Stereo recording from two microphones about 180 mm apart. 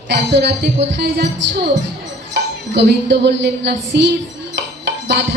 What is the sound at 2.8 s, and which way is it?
A woman's voice, 75° right (ahead or behind).